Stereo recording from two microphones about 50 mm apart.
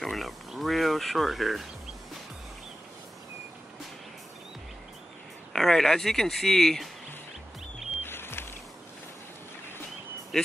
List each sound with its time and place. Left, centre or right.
0.0 s speech: centre
5.5 s speech: centre
8.0 s music: left
10.3 s speech: centre